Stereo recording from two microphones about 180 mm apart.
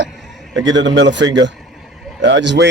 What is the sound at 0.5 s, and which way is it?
Speech, 90° right.